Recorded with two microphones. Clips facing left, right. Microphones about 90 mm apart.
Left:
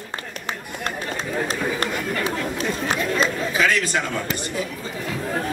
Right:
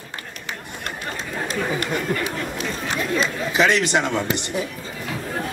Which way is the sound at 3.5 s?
25° right (ahead or behind).